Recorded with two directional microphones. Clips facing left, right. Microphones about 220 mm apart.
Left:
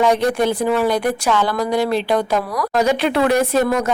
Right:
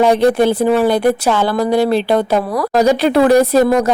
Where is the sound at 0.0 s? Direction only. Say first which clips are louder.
Right 5 dB; 30° right (ahead or behind).